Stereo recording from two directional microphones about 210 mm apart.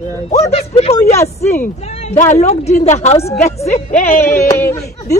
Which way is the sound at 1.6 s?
30° left (ahead or behind).